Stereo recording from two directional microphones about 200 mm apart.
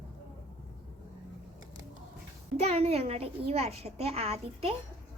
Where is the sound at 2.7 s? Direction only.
30° right (ahead or behind).